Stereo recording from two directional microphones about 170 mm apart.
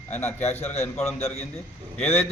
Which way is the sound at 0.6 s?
40° left (ahead or behind).